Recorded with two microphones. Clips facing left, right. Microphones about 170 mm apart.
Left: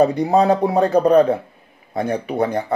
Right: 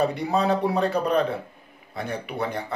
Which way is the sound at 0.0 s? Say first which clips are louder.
Left 8 dB; 40° left (ahead or behind).